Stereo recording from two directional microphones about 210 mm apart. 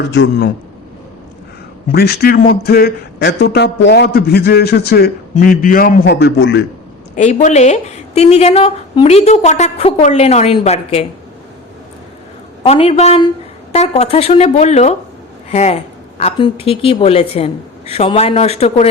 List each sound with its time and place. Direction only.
0.1 s a man's voice: 55° left (ahead or behind)
1.9 s a man's voice: 50° left (ahead or behind)
7.2 s a woman's voice: 35° left (ahead or behind)
12.6 s a woman's voice: 30° left (ahead or behind)